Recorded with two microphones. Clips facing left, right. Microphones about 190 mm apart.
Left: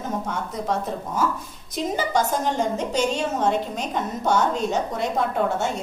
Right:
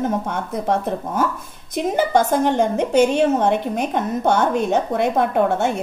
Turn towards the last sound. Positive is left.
turn(degrees=-60)  # may be behind; listen again after turning